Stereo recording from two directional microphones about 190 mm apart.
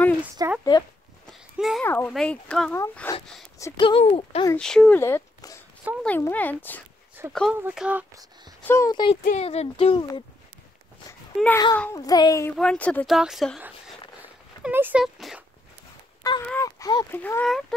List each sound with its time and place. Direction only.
0.4 s speech: 20° right (ahead or behind)
1.6 s a child's voice: centre (ahead or behind)
1.9 s speech: 10° left (ahead or behind)
2.8 s speech: 15° left (ahead or behind)
3.8 s speech: 30° left (ahead or behind)
4.6 s speech: 5° left (ahead or behind)
7.2 s speech: 15° right (ahead or behind)
8.6 s speech: 15° left (ahead or behind)
9.1 s speech: 35° left (ahead or behind)
11.1 s a sound: 15° left (ahead or behind)
11.7 s speech: 15° left (ahead or behind)
12.5 s speech: 5° left (ahead or behind)
16.2 s a sound: 15° left (ahead or behind)
16.4 s speech: 15° left (ahead or behind)